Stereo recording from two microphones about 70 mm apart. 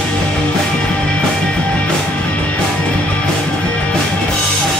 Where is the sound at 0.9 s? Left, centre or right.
Centre.